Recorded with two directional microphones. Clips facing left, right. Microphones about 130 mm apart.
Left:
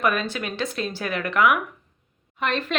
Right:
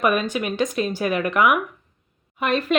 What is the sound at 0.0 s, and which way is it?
Speech, 15° right (ahead or behind).